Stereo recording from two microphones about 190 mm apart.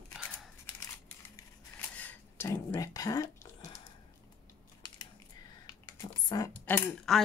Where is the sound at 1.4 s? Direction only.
10° left (ahead or behind).